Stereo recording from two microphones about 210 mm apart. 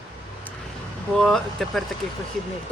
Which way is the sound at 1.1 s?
Centre (ahead or behind).